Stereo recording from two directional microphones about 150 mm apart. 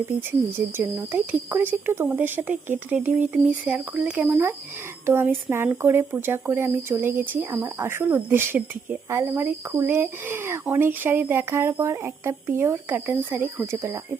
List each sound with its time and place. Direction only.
0.8 s speech: 15° right (ahead or behind)